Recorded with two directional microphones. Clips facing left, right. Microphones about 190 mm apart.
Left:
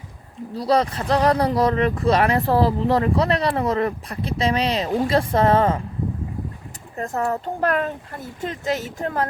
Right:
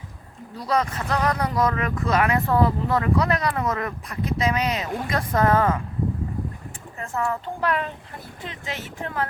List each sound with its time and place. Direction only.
0.5 s speech: 35° left (ahead or behind)
6.9 s speech: 40° left (ahead or behind)